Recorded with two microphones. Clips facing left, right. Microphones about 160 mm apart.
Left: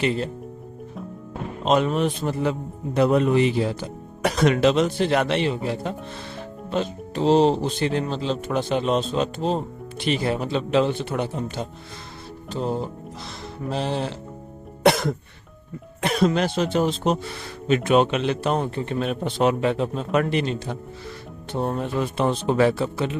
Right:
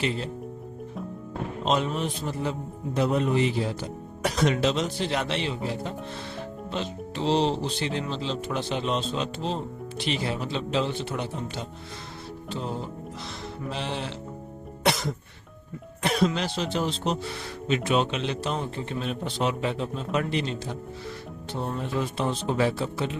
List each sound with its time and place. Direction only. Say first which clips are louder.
1.6 s a man's voice: left 6 dB; 55° left (ahead or behind)
6.7 s speech: left 8 dB; 45° left (ahead or behind)
12.5 s music: left 7 dB; 40° left (ahead or behind)
14.8 s a man's voice: left 7 dB; 55° left (ahead or behind)